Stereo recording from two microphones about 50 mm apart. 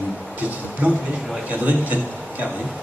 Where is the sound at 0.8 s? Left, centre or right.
Right.